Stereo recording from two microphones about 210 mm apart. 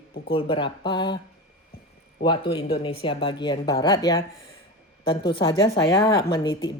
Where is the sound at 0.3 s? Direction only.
25° left (ahead or behind).